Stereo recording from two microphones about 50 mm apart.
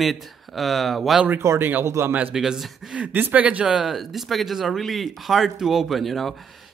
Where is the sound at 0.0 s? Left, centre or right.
Centre.